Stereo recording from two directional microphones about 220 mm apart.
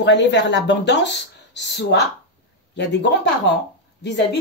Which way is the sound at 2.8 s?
55° left (ahead or behind).